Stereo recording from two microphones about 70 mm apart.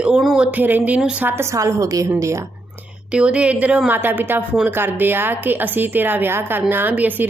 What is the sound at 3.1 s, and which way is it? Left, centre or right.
Speech, centre.